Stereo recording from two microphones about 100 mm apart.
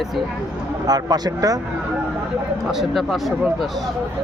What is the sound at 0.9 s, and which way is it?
Speech, 40° right (ahead or behind).